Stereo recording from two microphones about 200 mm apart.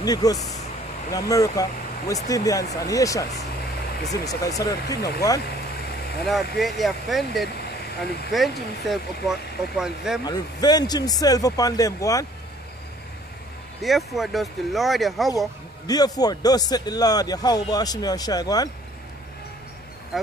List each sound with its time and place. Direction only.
0.0 s speech: 20° left (ahead or behind)
6.2 s speech: centre (ahead or behind)
10.2 s speech: 20° left (ahead or behind)
13.7 s speech: centre (ahead or behind)
15.9 s speech: 20° left (ahead or behind)